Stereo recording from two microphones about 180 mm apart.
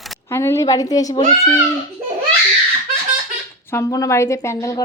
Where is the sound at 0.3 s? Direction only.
15° left (ahead or behind).